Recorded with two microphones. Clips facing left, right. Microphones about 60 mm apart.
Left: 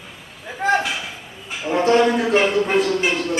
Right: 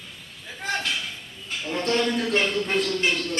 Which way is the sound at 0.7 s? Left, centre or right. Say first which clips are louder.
Left 6 dB; centre.